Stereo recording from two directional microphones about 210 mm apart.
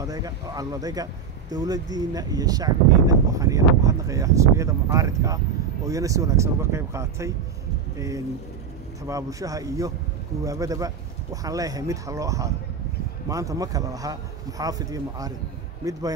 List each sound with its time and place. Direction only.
0.0 s speech: 15° right (ahead or behind)
9.0 s speech: 15° right (ahead or behind)